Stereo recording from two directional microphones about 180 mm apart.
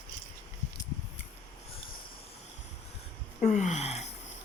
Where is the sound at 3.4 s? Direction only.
40° left (ahead or behind).